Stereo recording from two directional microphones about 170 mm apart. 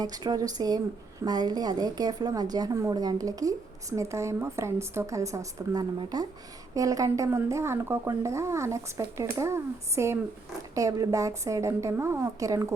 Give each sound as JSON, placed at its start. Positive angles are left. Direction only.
{"t": 0.0, "sound": "a woman's voice", "side_deg": -25}